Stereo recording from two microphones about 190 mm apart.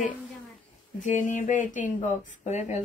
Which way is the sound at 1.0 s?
40° left (ahead or behind).